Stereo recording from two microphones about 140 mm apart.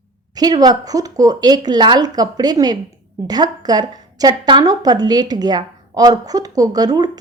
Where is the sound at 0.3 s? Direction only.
30° right (ahead or behind).